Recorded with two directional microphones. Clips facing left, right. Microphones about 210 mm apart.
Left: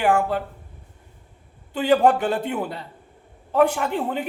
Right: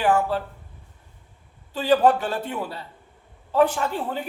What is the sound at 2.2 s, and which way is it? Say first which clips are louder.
A man's voice: left 4 dB; 20° left (ahead or behind).